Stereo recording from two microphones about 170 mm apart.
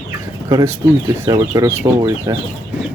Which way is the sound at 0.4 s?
20° right (ahead or behind).